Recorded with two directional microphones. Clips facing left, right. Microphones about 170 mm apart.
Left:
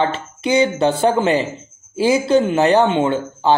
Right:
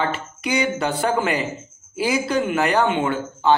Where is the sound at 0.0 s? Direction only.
25° left (ahead or behind).